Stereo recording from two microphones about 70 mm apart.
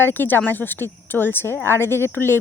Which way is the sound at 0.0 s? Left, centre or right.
Left.